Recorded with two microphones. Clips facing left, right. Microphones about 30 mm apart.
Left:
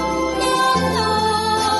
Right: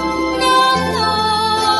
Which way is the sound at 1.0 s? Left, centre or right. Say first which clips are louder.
Right 2 dB; right.